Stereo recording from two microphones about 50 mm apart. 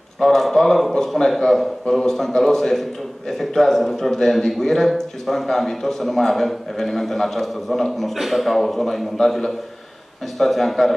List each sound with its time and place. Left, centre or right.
0.2 s a man's voice: centre